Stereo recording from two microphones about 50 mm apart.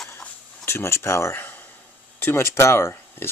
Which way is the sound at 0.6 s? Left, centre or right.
Left.